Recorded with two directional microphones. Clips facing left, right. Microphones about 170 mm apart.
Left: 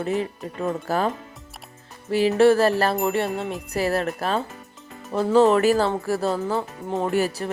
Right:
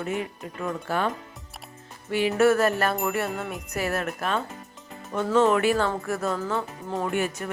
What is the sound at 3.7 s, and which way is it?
Speech, 35° left (ahead or behind).